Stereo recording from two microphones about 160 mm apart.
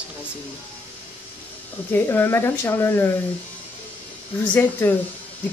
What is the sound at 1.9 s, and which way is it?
Speech, 15° left (ahead or behind).